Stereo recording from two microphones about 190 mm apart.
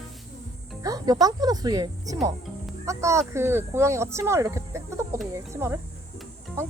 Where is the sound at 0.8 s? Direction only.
20° right (ahead or behind).